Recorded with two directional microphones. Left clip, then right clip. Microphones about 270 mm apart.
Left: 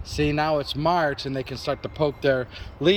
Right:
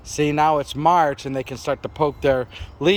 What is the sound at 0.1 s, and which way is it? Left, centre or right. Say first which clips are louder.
Speech: right 5 dB; centre.